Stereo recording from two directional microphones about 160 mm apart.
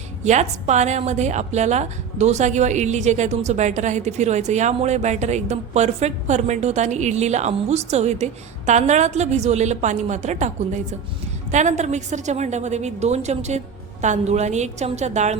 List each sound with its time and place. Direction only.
0.3 s a woman's voice: 45° right (ahead or behind)